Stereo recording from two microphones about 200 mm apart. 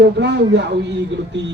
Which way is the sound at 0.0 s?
60° right (ahead or behind).